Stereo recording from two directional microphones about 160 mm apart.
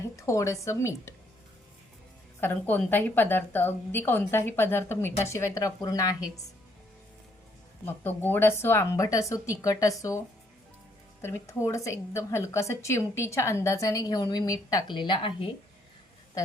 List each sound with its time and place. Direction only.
0.2 s a woman's voice: 20° left (ahead or behind)
2.4 s a woman's voice: 15° left (ahead or behind)
7.9 s a woman's voice: 10° left (ahead or behind); by 15.4 s 30° left (ahead or behind)